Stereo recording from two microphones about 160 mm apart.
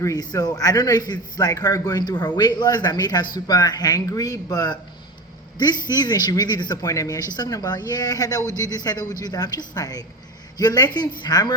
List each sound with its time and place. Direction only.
0.0 s a man's voice: 20° left (ahead or behind)